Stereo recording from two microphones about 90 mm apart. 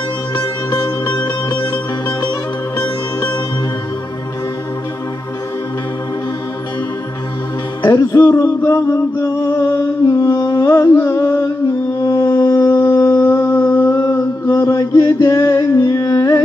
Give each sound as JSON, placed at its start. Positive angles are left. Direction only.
{"t": 0.7, "sound": "music", "side_deg": 55}
{"t": 7.8, "sound": "music", "side_deg": 35}
{"t": 8.3, "sound": "a sound", "side_deg": 35}
{"t": 14.4, "sound": "mantra", "side_deg": 30}
{"t": 15.5, "sound": "humming", "side_deg": 35}